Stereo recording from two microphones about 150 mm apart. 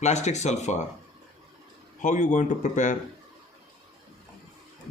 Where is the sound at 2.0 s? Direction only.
60° left (ahead or behind).